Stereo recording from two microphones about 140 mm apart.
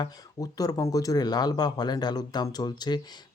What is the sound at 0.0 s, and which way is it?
Speech, 25° left (ahead or behind).